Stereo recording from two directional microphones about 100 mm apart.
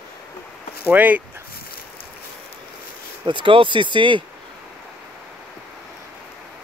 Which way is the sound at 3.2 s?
55° right (ahead or behind).